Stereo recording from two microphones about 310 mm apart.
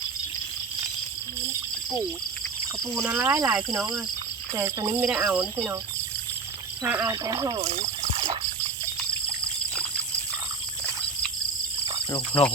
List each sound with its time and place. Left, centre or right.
2.8 s speech: centre
6.8 s speech: centre
8.1 s trickle: centre